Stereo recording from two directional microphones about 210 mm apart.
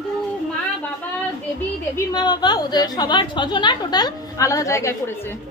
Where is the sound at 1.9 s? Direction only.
20° left (ahead or behind).